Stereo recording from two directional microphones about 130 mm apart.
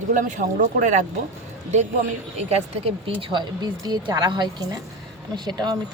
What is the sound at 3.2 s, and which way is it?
A woman's voice, 40° right (ahead or behind).